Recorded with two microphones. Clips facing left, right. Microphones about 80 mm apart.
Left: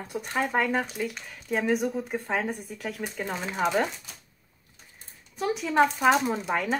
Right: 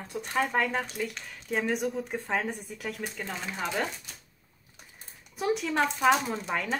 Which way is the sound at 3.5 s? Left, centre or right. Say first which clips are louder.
Left 6 dB; left.